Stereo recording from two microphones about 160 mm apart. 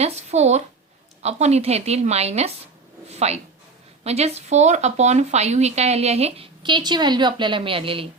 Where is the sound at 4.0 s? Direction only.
40° right (ahead or behind).